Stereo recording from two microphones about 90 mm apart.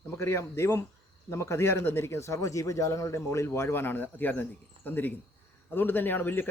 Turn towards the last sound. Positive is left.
turn(degrees=20)  # may be behind; listen again after turning